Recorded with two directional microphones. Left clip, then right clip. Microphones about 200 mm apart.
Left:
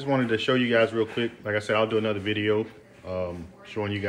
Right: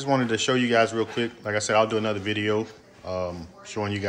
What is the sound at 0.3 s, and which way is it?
Speech, 15° right (ahead or behind).